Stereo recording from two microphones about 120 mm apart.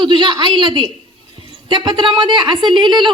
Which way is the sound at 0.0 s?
40° right (ahead or behind).